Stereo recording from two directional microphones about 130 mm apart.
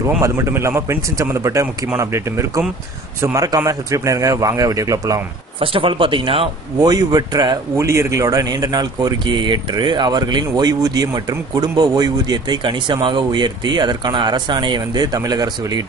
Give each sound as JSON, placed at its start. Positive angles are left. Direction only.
{"t": 0.2, "sound": "a man's voice", "side_deg": -20}
{"t": 5.6, "sound": "a man's voice", "side_deg": -40}
{"t": 6.8, "sound": "a man's voice", "side_deg": -30}